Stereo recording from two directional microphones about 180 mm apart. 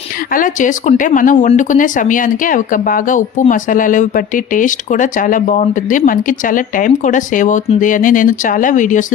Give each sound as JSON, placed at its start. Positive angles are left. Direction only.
{"t": 0.3, "sound": "speech", "side_deg": 45}